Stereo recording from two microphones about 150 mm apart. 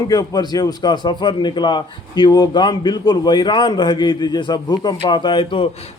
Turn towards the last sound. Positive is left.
turn(degrees=35)  # may be behind; listen again after turning